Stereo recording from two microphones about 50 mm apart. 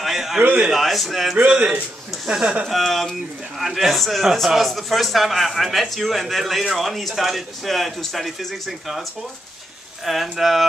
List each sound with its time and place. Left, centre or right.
0.0 s a sound: centre
0.6 s a man's voice: centre
1.4 s a man's voice: right
2.2 s speech: centre
2.7 s a man's voice: centre
10.0 s a man's voice: centre